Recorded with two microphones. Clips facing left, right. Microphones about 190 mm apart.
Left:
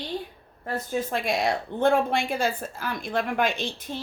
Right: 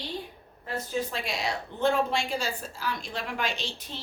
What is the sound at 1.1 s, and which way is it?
Speech, 55° left (ahead or behind).